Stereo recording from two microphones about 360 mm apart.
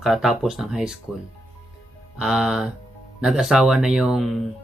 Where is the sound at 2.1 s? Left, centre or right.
Centre.